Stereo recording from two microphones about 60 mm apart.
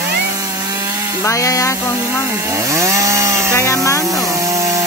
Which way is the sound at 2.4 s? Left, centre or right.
Right.